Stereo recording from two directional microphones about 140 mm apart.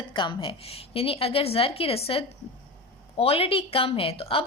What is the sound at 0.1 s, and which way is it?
A woman's voice, 35° left (ahead or behind).